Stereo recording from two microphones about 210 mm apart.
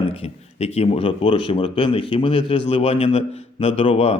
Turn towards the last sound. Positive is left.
turn(degrees=25)  # may be behind; listen again after turning